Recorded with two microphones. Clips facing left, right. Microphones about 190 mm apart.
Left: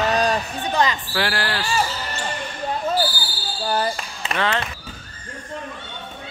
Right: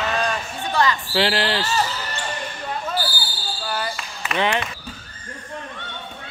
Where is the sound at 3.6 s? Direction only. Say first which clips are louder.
Left 5 dB; 35° left (ahead or behind).